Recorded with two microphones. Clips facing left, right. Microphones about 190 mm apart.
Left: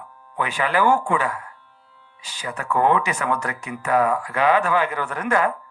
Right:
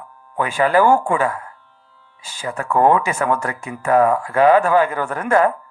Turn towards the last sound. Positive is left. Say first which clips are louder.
# right 5 dB
turn(degrees=-45)  # may be behind; listen again after turning